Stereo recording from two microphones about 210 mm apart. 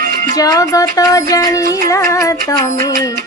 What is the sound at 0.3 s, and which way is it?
Music, 15° left (ahead or behind).